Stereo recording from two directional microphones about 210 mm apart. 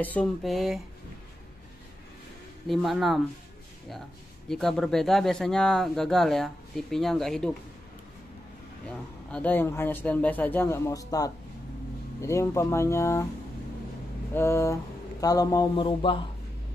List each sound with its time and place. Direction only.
0.0 s speech: 5° left (ahead or behind)
2.7 s speech: centre (ahead or behind)
4.5 s speech: centre (ahead or behind)
9.3 s speech: 10° left (ahead or behind)
14.3 s speech: 10° left (ahead or behind)